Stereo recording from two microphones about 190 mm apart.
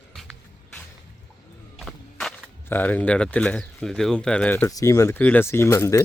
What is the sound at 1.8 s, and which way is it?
Speech, centre (ahead or behind).